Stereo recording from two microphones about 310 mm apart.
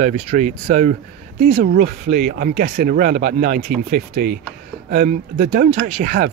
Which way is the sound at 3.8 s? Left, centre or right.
Right.